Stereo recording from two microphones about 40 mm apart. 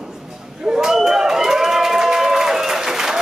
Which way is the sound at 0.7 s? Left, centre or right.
Centre.